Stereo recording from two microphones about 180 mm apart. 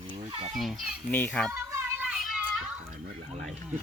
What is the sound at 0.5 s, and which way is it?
Speech, centre (ahead or behind).